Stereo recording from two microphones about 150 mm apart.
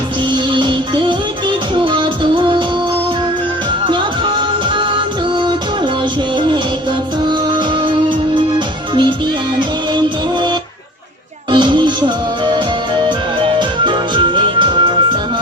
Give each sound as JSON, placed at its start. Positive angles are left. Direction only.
{"t": 0.5, "sound": "music", "side_deg": -30}
{"t": 3.8, "sound": "music", "side_deg": -35}
{"t": 7.3, "sound": "music", "side_deg": -30}
{"t": 11.5, "sound": "music", "side_deg": -30}